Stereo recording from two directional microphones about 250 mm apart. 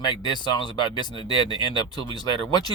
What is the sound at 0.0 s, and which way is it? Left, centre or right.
Speech, centre.